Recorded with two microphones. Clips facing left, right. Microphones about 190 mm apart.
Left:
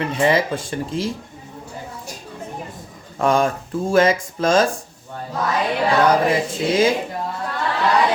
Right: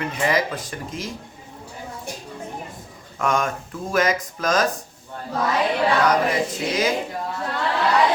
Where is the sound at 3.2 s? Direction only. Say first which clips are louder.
Left 5 dB; 30° left (ahead or behind).